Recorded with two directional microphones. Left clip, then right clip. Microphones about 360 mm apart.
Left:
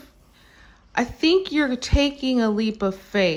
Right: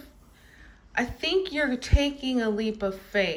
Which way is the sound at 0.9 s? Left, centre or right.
Centre.